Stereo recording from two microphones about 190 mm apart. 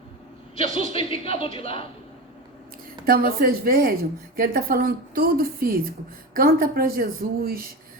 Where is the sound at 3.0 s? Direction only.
50° right (ahead or behind).